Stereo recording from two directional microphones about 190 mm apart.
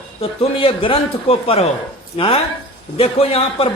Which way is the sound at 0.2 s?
30° left (ahead or behind).